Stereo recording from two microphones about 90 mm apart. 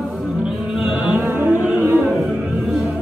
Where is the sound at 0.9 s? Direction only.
15° right (ahead or behind).